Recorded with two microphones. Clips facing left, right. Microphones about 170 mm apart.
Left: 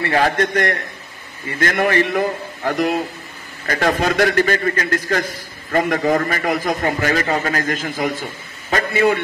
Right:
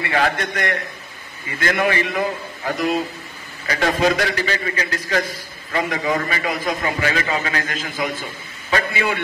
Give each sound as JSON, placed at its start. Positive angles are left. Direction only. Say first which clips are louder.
{"t": 0.0, "sound": "a man's voice", "louder": "left 4 dB", "side_deg": 40}
{"t": 3.6, "sound": "a man's voice", "louder": "even", "side_deg": 50}